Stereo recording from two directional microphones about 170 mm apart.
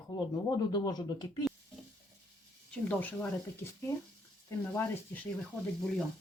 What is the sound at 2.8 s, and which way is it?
Speech, 10° left (ahead or behind).